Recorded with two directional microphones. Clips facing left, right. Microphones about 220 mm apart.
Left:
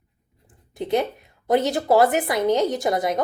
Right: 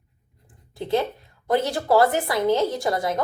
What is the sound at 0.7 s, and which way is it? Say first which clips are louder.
A woman's voice: left 1 dB; 20° left (ahead or behind).